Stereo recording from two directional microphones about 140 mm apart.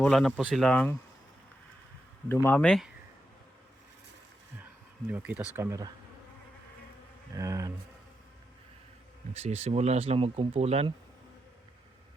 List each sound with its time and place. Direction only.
0.0 s speech: centre (ahead or behind)
2.3 s speech: 15° left (ahead or behind)
2.6 s speech: centre (ahead or behind)
5.1 s speech: 10° right (ahead or behind)
5.5 s speech: 20° right (ahead or behind)
7.3 s speech: 25° right (ahead or behind)
9.3 s speech: 50° right (ahead or behind)